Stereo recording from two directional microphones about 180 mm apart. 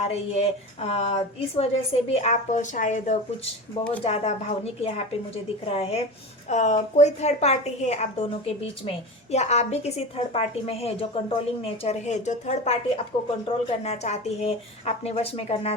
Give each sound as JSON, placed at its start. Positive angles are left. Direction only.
{"t": 0.1, "sound": "a woman's voice", "side_deg": 35}